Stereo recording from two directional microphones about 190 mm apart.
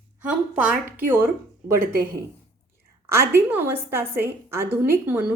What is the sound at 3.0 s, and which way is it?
Speech, 15° right (ahead or behind).